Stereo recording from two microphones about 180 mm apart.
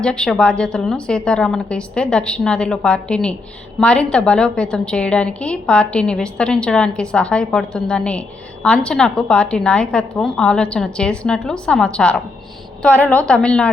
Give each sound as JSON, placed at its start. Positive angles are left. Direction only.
{"t": 0.0, "sound": "a woman's voice", "side_deg": 5}